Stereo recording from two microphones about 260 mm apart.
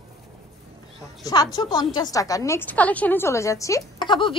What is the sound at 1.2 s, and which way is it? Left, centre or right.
A woman's voice, centre.